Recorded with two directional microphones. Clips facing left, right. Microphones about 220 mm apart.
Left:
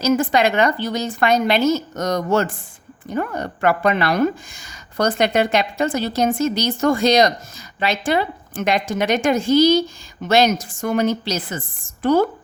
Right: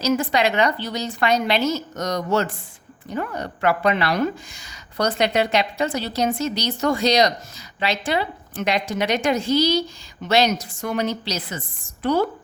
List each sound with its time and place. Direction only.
0.0 s speech: 50° left (ahead or behind)